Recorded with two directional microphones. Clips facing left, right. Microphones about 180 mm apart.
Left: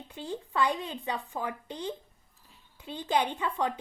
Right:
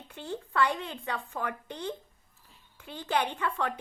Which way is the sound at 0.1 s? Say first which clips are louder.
Even; 15° left (ahead or behind).